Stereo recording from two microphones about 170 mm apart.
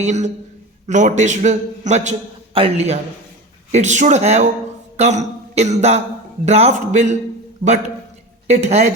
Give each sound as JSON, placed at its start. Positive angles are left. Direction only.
{"t": 0.0, "sound": "a man's voice", "side_deg": -45}
{"t": 8.4, "sound": "a woman's voice", "side_deg": -40}